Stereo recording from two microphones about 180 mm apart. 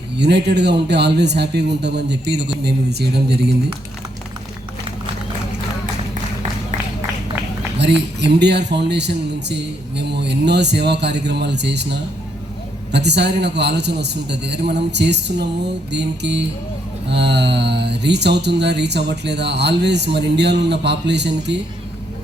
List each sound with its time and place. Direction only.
0.2 s speech: 70° right (ahead or behind)
7.8 s speech: 70° right (ahead or behind)